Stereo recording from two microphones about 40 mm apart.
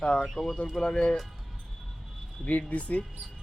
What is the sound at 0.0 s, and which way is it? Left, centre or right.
Speech, left.